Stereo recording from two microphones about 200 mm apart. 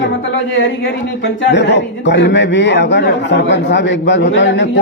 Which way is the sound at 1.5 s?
60° left (ahead or behind).